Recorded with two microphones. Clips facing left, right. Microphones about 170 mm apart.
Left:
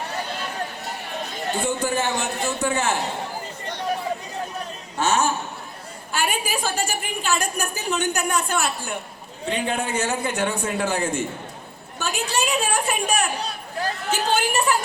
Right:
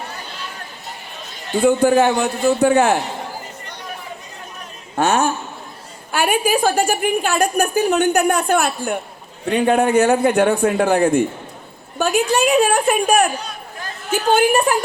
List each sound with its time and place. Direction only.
1.6 s a woman's voice: 55° right (ahead or behind)
4.9 s a woman's voice: 55° right (ahead or behind)
13.4 s a sound: 35° left (ahead or behind)
14.1 s a woman's voice: 55° right (ahead or behind)